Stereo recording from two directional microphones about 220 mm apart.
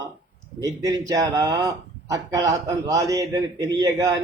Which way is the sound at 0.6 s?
15° right (ahead or behind).